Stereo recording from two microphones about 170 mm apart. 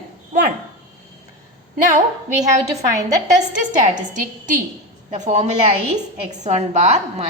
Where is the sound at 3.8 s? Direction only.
50° right (ahead or behind).